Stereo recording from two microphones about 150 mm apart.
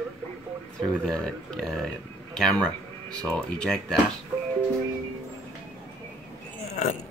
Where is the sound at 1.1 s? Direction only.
5° left (ahead or behind).